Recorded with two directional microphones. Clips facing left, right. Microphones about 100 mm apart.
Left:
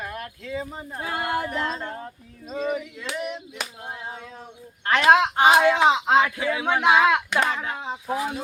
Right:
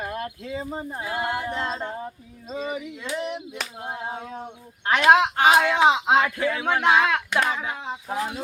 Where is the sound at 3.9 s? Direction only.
35° right (ahead or behind).